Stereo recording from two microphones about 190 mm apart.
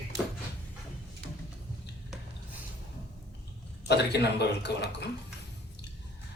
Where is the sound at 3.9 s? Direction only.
60° left (ahead or behind).